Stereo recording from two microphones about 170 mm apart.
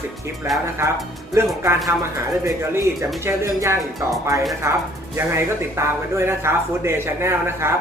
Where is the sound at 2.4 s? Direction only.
15° right (ahead or behind).